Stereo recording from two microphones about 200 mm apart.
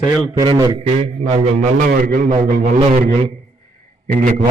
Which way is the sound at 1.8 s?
45° right (ahead or behind).